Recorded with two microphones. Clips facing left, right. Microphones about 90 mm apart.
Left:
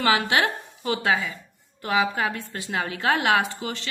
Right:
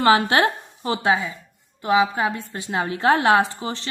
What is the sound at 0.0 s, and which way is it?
A woman's voice, 35° right (ahead or behind).